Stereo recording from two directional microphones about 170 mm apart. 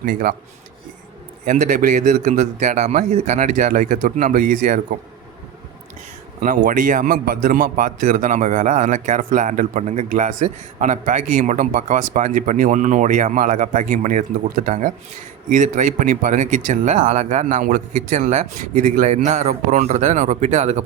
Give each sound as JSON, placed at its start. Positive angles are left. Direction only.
{"t": 0.0, "sound": "speech", "side_deg": -55}
{"t": 1.5, "sound": "a man's voice", "side_deg": -50}
{"t": 6.4, "sound": "a man's voice", "side_deg": -55}